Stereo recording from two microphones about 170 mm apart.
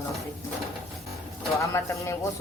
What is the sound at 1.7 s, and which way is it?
Speech, 15° left (ahead or behind).